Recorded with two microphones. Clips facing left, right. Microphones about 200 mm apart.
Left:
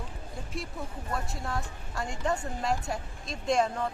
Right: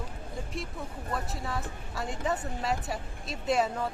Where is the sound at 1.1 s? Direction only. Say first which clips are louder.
Even; centre (ahead or behind).